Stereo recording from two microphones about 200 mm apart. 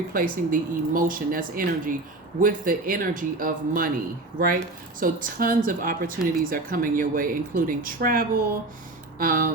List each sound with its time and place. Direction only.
0.1 s speech: 45° right (ahead or behind)
4.9 s speech: 45° right (ahead or behind)